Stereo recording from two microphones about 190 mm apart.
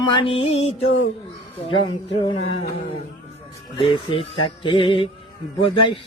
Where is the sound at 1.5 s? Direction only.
30° left (ahead or behind).